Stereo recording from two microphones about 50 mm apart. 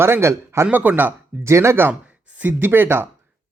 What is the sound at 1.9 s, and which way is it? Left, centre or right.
Speech, right.